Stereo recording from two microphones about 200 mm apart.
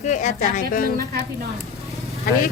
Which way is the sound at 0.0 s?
35° left (ahead or behind).